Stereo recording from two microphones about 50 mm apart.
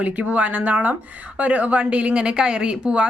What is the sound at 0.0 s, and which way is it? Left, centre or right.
Speech, right.